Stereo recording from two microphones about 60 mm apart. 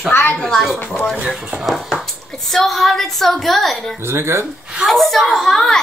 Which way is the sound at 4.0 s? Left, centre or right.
Right.